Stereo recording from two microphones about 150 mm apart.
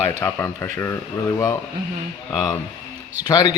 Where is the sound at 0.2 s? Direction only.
15° left (ahead or behind).